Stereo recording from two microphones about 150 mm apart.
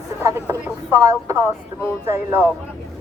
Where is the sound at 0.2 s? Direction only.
15° right (ahead or behind).